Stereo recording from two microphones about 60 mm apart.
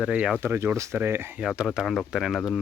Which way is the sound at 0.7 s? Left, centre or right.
Right.